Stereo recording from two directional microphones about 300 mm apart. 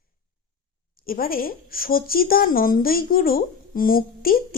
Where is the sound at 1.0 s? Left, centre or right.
Left.